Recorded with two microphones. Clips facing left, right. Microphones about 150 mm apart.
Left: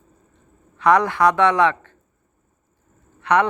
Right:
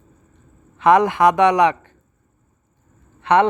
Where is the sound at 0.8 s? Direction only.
20° right (ahead or behind).